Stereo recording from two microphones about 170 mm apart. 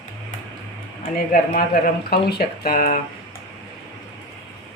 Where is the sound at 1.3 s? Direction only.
55° left (ahead or behind).